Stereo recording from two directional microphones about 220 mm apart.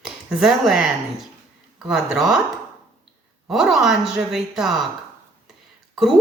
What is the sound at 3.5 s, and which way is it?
A woman's voice, centre (ahead or behind).